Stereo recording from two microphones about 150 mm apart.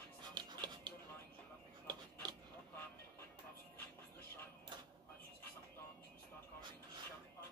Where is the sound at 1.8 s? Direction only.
30° right (ahead or behind).